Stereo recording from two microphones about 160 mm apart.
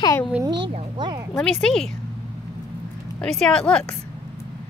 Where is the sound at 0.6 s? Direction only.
35° right (ahead or behind).